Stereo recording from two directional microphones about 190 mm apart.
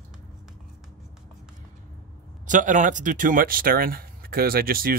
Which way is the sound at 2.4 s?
40° right (ahead or behind).